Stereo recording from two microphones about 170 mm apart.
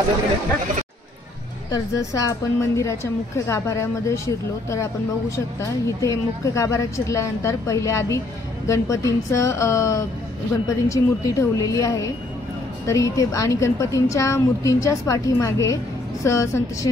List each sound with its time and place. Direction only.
1.7 s a woman's voice: 20° left (ahead or behind)
5.9 s a woman's voice: 20° left (ahead or behind)